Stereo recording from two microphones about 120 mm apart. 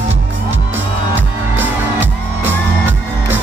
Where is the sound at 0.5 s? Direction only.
15° right (ahead or behind).